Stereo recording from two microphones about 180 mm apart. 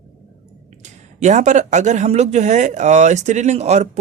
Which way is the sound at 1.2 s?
40° right (ahead or behind).